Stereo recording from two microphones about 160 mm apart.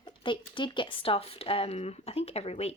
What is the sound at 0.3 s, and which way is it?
A woman's voice, 30° left (ahead or behind).